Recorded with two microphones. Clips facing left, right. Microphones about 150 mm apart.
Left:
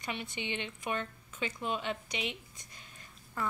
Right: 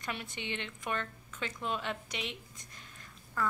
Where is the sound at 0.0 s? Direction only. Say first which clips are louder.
Left 1 dB; centre (ahead or behind).